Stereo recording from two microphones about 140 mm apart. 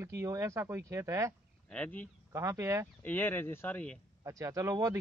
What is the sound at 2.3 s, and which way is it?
Speech, 20° right (ahead or behind).